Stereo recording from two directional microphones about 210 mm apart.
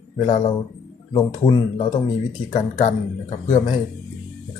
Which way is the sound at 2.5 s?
35° left (ahead or behind).